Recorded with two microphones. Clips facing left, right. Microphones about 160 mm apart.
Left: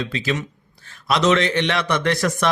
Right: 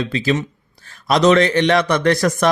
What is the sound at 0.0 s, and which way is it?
Speech, 35° right (ahead or behind).